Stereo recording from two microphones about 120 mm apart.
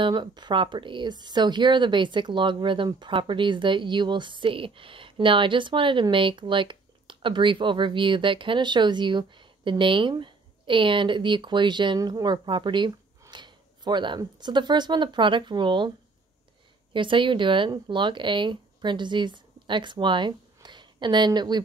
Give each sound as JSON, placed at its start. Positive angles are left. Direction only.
{"t": 0.0, "sound": "speech", "side_deg": -40}
{"t": 16.9, "sound": "speech", "side_deg": -45}